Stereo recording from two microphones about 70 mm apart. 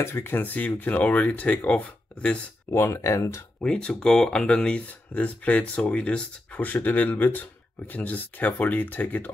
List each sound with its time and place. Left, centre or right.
0.0 s speech: left
2.7 s speech: left
3.6 s speech: centre